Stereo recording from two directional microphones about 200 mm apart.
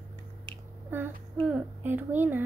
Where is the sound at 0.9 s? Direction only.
10° right (ahead or behind).